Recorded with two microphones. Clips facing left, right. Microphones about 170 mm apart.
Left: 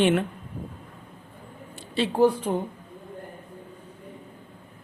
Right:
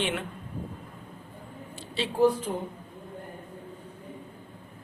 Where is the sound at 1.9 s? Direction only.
55° left (ahead or behind).